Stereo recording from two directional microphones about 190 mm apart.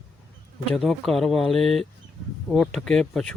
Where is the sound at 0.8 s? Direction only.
Centre (ahead or behind).